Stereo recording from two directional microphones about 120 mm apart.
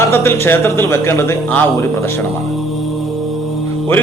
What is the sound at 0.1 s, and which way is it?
Speech, 20° left (ahead or behind).